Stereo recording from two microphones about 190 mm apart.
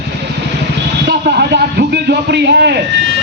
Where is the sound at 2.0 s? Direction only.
60° right (ahead or behind).